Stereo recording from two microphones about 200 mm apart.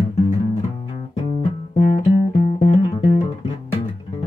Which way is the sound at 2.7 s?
25° left (ahead or behind).